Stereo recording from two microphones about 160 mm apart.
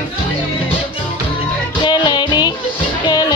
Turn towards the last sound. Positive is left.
turn(degrees=25)  # may be behind; listen again after turning